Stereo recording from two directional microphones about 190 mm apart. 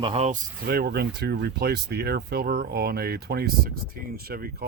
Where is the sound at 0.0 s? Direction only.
35° right (ahead or behind).